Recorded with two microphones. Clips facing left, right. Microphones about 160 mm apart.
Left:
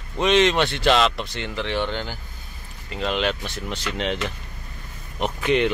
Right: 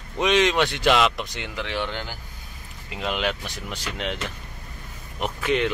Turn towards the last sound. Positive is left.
turn(degrees=0)  # may be behind; listen again after turning